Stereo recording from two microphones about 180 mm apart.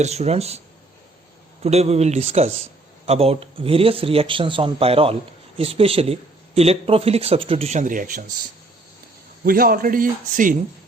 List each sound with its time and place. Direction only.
0.0 s a man's voice: 35° right (ahead or behind)
1.6 s a man's voice: 35° right (ahead or behind)
9.4 s a man's voice: 55° right (ahead or behind)